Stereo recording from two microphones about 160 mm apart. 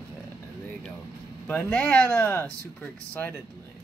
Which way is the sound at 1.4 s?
10° left (ahead or behind).